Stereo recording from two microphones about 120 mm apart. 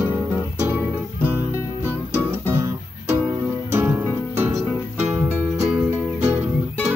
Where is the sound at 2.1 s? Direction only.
25° right (ahead or behind).